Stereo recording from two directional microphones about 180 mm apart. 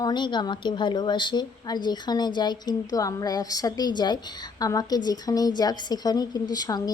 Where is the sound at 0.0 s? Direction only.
25° left (ahead or behind).